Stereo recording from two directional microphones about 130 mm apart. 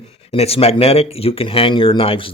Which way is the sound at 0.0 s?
50° left (ahead or behind).